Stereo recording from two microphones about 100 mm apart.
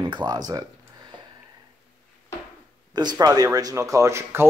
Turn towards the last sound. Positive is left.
turn(degrees=-25)  # may be behind; listen again after turning